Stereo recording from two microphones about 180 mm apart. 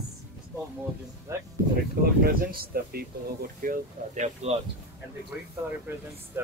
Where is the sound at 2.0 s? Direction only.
55° right (ahead or behind).